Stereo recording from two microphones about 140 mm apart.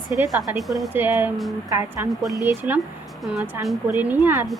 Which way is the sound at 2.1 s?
Centre (ahead or behind).